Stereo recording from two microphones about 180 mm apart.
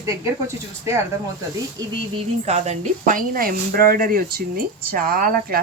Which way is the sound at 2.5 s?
40° right (ahead or behind).